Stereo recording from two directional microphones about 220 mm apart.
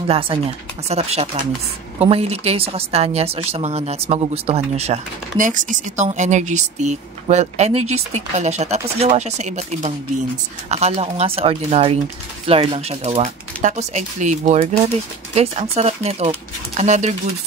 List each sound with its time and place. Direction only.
0.8 s speech: 30° right (ahead or behind)